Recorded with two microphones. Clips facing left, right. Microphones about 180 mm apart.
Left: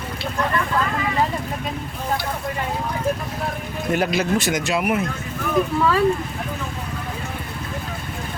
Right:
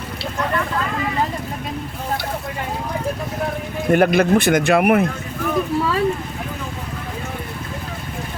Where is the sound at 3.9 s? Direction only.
55° right (ahead or behind).